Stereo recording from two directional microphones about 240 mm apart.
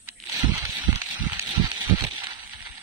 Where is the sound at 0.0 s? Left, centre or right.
Centre.